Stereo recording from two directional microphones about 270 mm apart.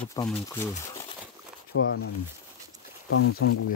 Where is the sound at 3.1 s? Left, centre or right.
Left.